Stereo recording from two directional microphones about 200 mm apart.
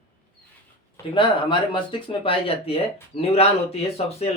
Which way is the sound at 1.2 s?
25° left (ahead or behind).